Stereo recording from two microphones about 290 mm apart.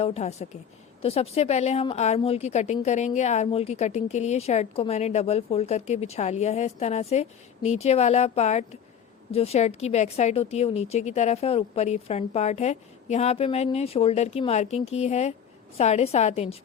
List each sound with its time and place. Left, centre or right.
0.0 s a woman's voice: left